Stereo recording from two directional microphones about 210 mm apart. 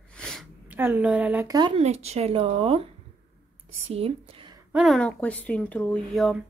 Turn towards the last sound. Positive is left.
turn(degrees=0)  # may be behind; listen again after turning